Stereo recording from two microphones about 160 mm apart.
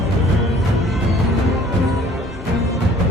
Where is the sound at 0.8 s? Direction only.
Centre (ahead or behind).